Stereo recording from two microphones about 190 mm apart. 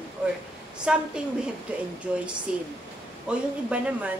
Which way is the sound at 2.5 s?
5° right (ahead or behind).